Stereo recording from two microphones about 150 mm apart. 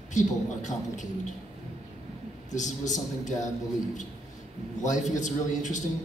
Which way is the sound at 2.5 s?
55° left (ahead or behind).